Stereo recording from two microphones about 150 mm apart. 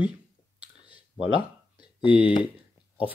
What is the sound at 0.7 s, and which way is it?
Clicking, 30° left (ahead or behind).